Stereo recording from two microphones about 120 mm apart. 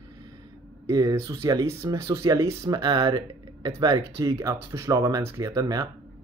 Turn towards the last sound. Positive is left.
turn(degrees=-30)  # may be behind; listen again after turning